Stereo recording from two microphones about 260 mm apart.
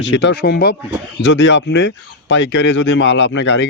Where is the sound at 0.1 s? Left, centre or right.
Left.